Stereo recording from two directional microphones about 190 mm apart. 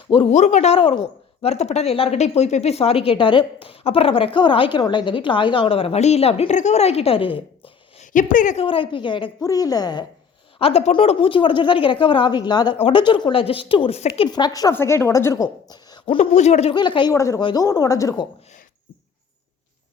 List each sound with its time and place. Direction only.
0.1 s speech: 30° left (ahead or behind)
8.6 s a woman's voice: 25° left (ahead or behind)
10.6 s a woman's voice: 30° left (ahead or behind)
16.7 s a woman's voice: 25° left (ahead or behind)